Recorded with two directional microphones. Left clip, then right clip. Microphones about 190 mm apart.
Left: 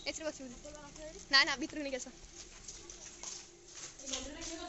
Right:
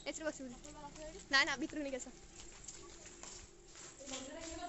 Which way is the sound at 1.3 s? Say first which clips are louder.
Left 4 dB; centre (ahead or behind).